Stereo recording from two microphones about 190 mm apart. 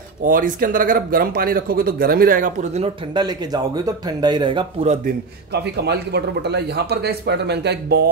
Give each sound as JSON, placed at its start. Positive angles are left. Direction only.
{"t": 0.2, "sound": "speech", "side_deg": -45}
{"t": 3.2, "sound": "speech", "side_deg": -20}
{"t": 5.0, "sound": "a man's voice", "side_deg": -60}